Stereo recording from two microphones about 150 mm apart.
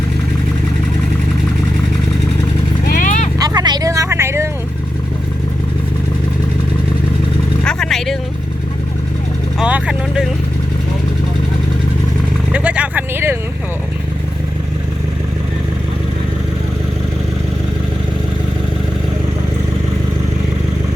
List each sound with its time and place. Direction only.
2.8 s horse: 65° left (ahead or behind)
3.3 s vehicle: 25° right (ahead or behind)
7.6 s vehicle: 5° left (ahead or behind)
9.6 s vehicle: 10° right (ahead or behind)
12.5 s vehicle: 10° right (ahead or behind)